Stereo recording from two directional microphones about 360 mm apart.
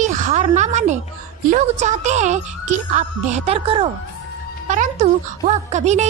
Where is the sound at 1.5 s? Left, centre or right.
Centre.